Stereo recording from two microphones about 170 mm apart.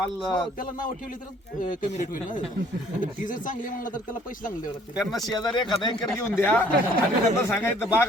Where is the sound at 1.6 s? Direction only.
50° left (ahead or behind).